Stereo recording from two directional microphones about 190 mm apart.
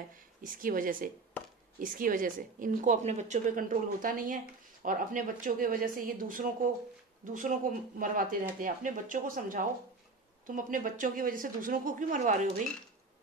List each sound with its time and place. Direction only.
0.4 s a woman's voice: 45° right (ahead or behind)